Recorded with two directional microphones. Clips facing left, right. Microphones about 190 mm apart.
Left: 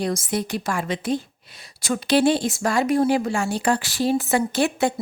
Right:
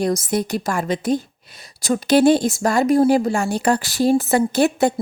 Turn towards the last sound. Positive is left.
turn(degrees=-40)  # may be behind; listen again after turning